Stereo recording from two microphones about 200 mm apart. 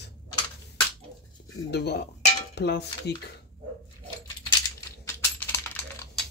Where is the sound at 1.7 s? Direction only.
55° left (ahead or behind).